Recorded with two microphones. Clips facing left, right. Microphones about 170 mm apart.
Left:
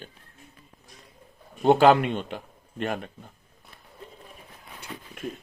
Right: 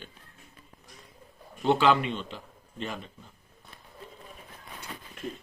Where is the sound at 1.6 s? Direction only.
50° left (ahead or behind).